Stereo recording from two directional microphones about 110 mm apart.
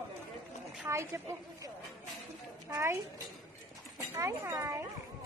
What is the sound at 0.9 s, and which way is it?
Speech, 25° right (ahead or behind).